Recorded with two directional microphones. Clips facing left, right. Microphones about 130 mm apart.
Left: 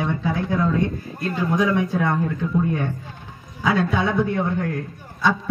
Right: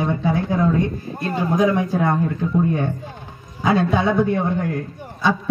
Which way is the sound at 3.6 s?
25° right (ahead or behind).